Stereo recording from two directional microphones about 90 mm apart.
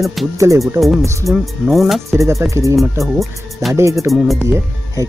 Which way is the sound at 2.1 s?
35° right (ahead or behind).